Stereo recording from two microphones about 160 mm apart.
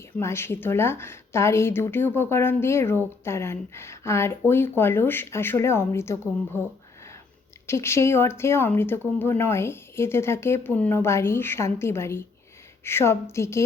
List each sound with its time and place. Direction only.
0.2 s speech: 15° left (ahead or behind)
7.7 s speech: 15° left (ahead or behind)